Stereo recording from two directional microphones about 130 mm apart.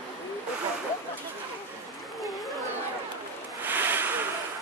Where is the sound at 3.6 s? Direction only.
15° right (ahead or behind).